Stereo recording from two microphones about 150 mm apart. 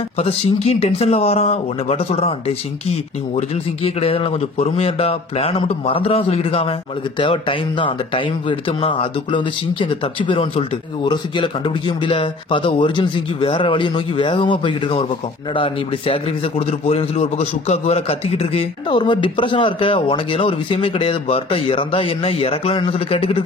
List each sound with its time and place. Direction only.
0.2 s a man's voice: 40° left (ahead or behind)